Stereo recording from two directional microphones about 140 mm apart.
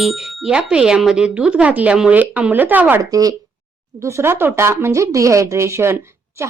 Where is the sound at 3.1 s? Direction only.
25° right (ahead or behind).